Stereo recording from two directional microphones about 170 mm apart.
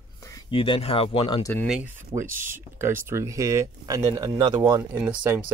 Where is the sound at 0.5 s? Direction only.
30° left (ahead or behind).